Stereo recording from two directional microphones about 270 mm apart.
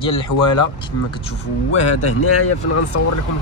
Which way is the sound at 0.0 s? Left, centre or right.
Centre.